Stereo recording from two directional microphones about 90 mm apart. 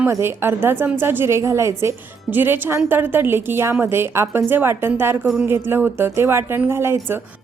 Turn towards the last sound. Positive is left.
turn(degrees=-25)  # may be behind; listen again after turning